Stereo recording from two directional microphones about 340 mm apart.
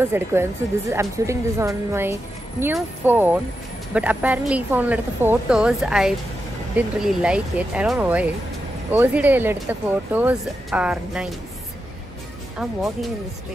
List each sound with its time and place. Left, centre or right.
0.0 s speech: centre